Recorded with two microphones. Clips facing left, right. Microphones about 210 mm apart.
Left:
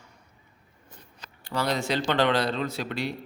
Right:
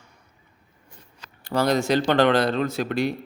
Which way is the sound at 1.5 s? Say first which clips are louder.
Right 6 dB; 45° right (ahead or behind).